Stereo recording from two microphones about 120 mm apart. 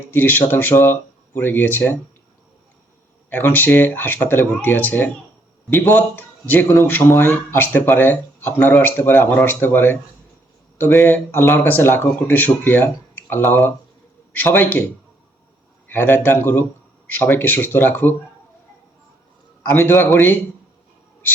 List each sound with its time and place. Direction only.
0.1 s speech: 15° left (ahead or behind)
3.2 s speech: 15° left (ahead or behind)
15.9 s speech: 15° left (ahead or behind)
19.7 s speech: 15° left (ahead or behind)